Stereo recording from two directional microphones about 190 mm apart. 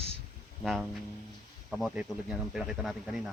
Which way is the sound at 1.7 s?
Centre (ahead or behind).